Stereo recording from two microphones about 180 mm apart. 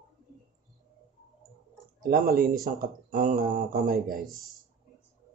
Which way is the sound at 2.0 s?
50° right (ahead or behind).